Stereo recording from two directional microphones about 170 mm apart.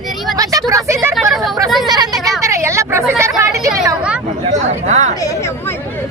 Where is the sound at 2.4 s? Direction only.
15° right (ahead or behind).